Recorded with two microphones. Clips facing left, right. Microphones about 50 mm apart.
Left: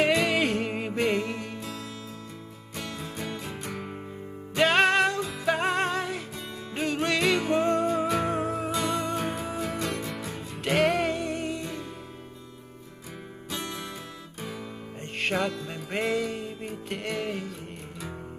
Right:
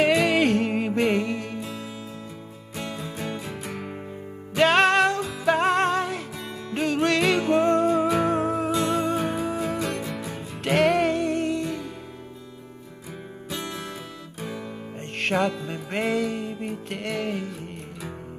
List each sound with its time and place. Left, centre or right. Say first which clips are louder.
0.0 s music: right 4 dB; centre
3.0 s music: right 3 dB; centre
13.5 s music: right 2 dB; centre
15.1 s music: right 4 dB; centre